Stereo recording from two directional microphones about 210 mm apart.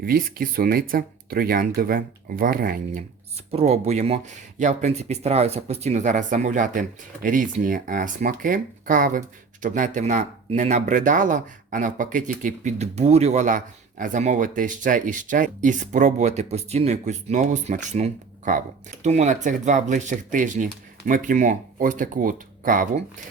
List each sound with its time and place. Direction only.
0.0 s speech: 45° right (ahead or behind)
3.5 s speech: 30° right (ahead or behind)